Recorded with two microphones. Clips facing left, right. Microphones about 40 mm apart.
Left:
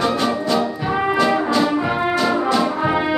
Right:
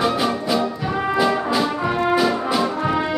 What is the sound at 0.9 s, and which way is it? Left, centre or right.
Brass instrument, centre.